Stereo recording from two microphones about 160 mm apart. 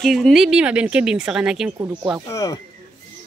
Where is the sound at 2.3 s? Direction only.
20° left (ahead or behind).